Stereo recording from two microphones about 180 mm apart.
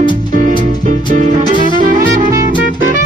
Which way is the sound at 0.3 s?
45° right (ahead or behind).